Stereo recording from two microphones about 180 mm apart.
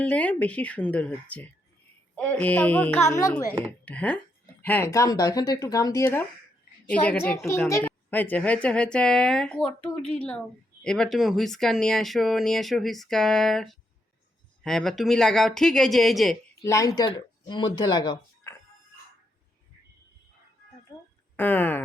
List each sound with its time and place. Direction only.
0.0 s a woman's voice: 5° left (ahead or behind)
3.7 s a woman's voice: 5° left (ahead or behind)
16.6 s speech: 15° left (ahead or behind)
21.3 s speech: 10° left (ahead or behind)